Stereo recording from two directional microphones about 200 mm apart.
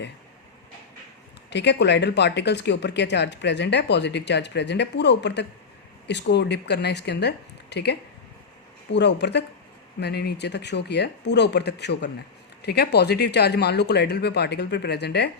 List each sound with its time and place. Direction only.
1.5 s speech: 60° left (ahead or behind)